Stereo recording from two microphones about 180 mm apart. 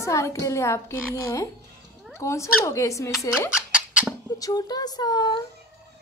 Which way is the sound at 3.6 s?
5° right (ahead or behind).